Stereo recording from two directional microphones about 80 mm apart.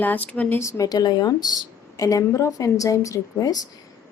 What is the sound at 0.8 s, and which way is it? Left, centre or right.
A woman's voice, left.